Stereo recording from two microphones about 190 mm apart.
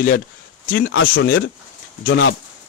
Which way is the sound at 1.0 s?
50° left (ahead or behind).